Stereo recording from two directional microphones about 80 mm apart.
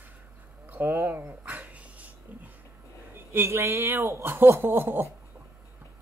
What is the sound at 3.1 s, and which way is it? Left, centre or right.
Speech, right.